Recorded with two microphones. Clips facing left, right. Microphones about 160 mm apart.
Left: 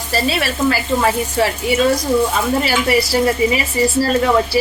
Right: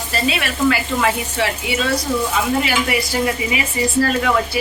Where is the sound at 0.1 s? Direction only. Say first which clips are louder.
Left 3 dB; 35° left (ahead or behind).